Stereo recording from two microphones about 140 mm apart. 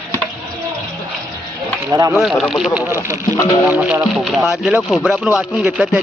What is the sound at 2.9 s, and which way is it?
Speech, 20° right (ahead or behind).